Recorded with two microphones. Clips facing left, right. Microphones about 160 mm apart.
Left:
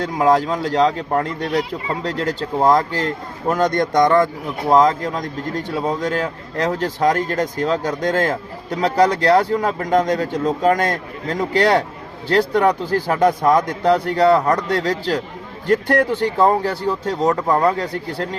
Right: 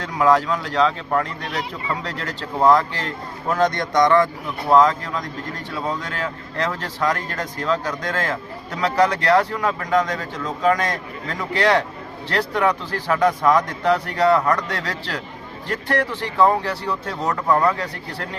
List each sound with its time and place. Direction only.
0.0 s a man's voice: 35° left (ahead or behind)